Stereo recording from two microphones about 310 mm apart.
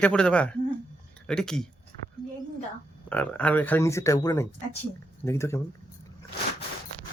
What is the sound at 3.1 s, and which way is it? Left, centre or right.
Speech, centre.